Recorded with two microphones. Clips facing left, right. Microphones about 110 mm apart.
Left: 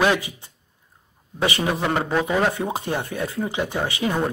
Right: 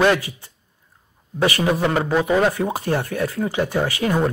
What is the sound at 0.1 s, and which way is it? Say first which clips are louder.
Speech: right 2 dB; 20° left (ahead or behind).